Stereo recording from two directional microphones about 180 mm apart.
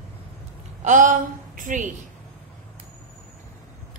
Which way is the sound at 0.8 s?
45° right (ahead or behind).